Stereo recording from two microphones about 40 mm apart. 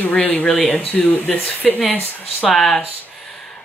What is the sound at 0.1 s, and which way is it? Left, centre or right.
Speech, left.